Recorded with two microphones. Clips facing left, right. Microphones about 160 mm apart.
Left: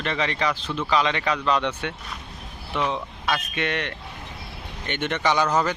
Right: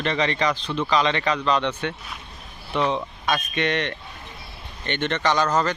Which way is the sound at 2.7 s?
Centre (ahead or behind).